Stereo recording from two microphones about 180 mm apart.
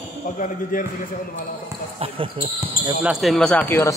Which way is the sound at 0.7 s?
50° left (ahead or behind).